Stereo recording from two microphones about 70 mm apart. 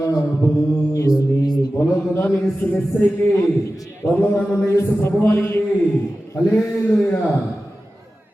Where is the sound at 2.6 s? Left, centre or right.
Left.